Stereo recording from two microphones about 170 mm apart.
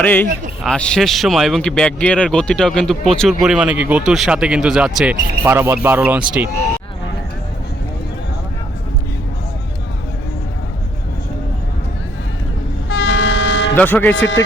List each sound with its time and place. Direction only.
0.0 s speech: 10° left (ahead or behind)
5.4 s speech: 15° right (ahead or behind)
12.9 s vehicle: 90° left
13.7 s speech: 10° left (ahead or behind)